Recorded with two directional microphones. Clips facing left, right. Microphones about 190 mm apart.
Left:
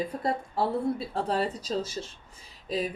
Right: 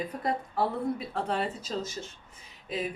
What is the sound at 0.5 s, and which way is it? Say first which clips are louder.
Speech: left 3 dB; 30° left (ahead or behind).